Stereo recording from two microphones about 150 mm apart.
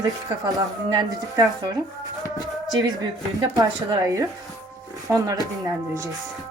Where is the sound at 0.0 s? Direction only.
25° right (ahead or behind).